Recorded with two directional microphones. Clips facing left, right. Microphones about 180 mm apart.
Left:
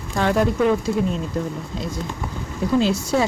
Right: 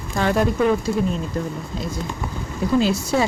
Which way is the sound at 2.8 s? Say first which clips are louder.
Even; 5° right (ahead or behind).